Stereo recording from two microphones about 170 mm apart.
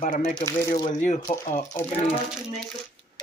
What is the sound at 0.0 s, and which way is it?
Speech, 50° left (ahead or behind).